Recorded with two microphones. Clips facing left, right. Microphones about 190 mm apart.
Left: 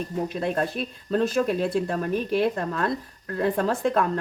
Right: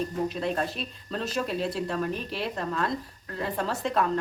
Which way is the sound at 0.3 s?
50° left (ahead or behind).